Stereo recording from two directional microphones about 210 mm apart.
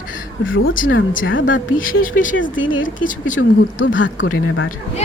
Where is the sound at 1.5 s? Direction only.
40° left (ahead or behind).